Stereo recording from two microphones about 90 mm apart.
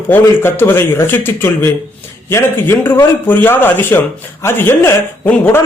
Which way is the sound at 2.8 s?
25° left (ahead or behind).